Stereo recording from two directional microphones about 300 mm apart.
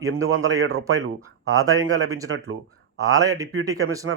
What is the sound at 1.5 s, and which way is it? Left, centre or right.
Speech, centre.